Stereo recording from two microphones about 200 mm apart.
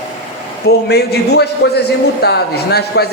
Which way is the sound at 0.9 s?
55° left (ahead or behind).